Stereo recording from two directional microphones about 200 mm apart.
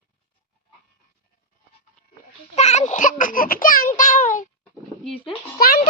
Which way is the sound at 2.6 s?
35° left (ahead or behind).